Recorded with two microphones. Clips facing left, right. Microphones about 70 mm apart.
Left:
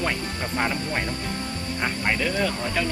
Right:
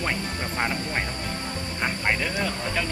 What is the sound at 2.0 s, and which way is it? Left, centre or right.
Speech, centre.